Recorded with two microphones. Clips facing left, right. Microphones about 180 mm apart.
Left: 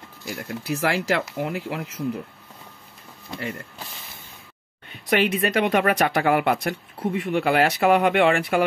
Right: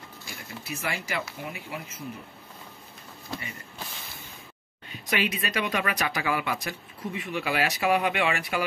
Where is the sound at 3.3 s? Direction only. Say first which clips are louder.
Left 8 dB; 75° left (ahead or behind).